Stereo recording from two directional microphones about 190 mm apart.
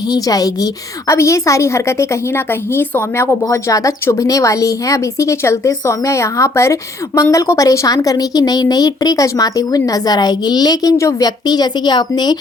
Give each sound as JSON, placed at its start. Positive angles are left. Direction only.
{"t": 0.1, "sound": "a woman's voice", "side_deg": 20}